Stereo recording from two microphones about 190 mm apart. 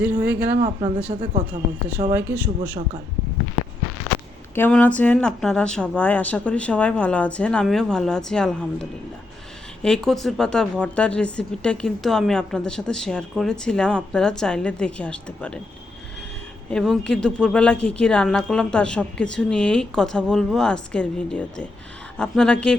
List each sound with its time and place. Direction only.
0.0 s speech: 10° right (ahead or behind)
0.6 s speech: 25° right (ahead or behind)
2.1 s speech: 10° right (ahead or behind)
4.5 s a woman's voice: 10° left (ahead or behind)
16.6 s a woman's voice: 5° left (ahead or behind)